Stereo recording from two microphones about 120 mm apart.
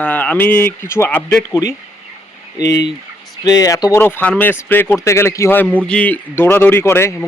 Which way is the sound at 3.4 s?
30° left (ahead or behind).